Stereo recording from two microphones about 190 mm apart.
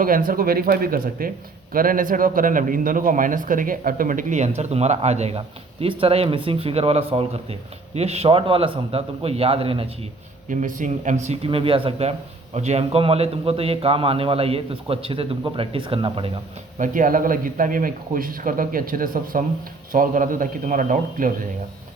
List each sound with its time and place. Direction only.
0.0 s a man's voice: 50° right (ahead or behind); by 9.8 s 30° right (ahead or behind)
10.5 s a man's voice: 45° right (ahead or behind); by 16.4 s 25° right (ahead or behind)
16.7 s a man's voice: 45° right (ahead or behind)